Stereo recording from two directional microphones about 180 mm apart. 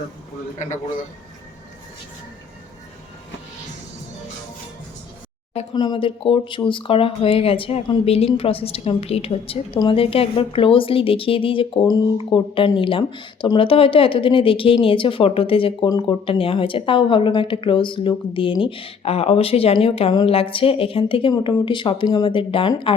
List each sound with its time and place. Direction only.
5.7 s speech: 25° left (ahead or behind)